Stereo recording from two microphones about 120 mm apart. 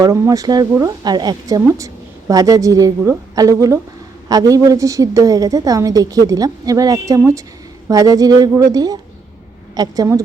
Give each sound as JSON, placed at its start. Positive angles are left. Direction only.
{"t": 0.0, "sound": "a woman's voice", "side_deg": -30}